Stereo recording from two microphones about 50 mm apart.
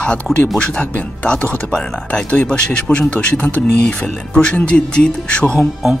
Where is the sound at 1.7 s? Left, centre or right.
Centre.